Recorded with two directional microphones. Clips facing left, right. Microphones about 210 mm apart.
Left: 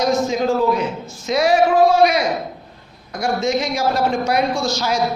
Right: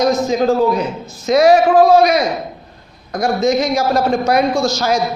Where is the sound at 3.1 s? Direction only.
40° right (ahead or behind).